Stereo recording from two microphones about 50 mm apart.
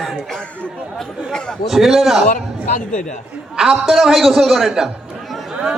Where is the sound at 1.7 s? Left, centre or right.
Centre.